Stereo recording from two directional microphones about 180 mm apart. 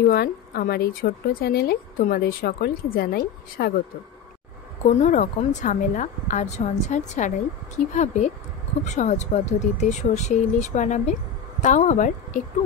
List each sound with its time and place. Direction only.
0.0 s speech: 60° left (ahead or behind)
5.0 s a woman's voice: 45° left (ahead or behind)